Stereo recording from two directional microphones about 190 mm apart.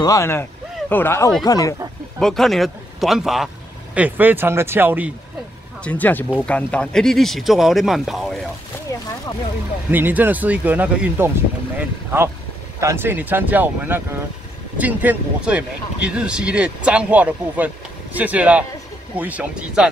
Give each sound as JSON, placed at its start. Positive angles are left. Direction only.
{"t": 0.0, "sound": "speech", "side_deg": 15}
{"t": 2.1, "sound": "a man's voice", "side_deg": 0}
{"t": 5.9, "sound": "speech", "side_deg": 10}
{"t": 9.8, "sound": "speech", "side_deg": -10}